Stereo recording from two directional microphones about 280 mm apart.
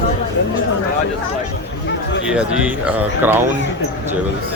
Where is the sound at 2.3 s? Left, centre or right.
Centre.